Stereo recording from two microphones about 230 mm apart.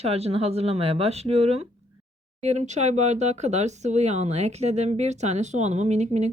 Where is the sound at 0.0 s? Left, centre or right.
Right.